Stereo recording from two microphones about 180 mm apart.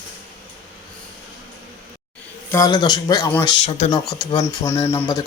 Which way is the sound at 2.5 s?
20° left (ahead or behind).